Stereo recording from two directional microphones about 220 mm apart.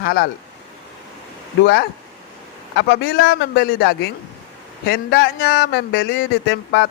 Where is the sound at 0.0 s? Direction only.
45° left (ahead or behind).